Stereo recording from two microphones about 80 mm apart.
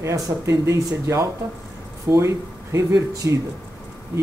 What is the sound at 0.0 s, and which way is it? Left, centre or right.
Speech, right.